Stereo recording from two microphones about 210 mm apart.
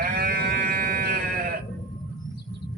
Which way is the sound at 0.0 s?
45° right (ahead or behind).